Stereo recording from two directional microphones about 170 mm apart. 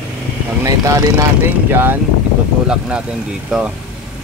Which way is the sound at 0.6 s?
20° right (ahead or behind).